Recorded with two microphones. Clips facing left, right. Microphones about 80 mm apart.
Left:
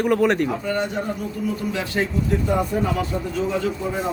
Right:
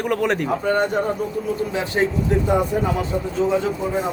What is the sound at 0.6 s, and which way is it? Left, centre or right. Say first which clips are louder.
Speech: right 4 dB; right.